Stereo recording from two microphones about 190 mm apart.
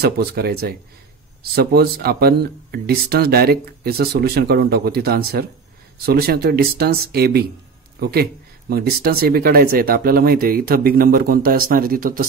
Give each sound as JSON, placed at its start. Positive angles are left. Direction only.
{"t": 0.0, "sound": "speech", "side_deg": -55}